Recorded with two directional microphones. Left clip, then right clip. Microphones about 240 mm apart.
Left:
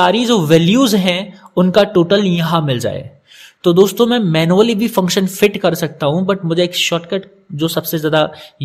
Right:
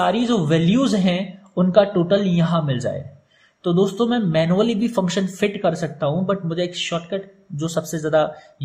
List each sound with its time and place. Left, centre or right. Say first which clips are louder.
0.0 s a man's voice: left 7 dB; left